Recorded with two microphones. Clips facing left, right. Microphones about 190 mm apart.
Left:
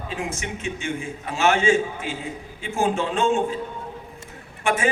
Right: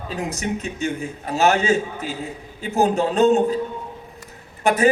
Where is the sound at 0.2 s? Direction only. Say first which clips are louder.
Right 7 dB; 40° right (ahead or behind).